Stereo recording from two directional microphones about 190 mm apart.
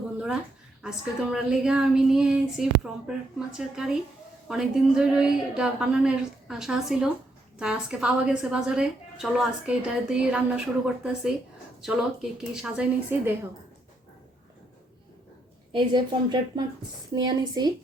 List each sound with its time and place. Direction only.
0.8 s a woman's voice: 5° right (ahead or behind)
15.7 s speech: 25° right (ahead or behind)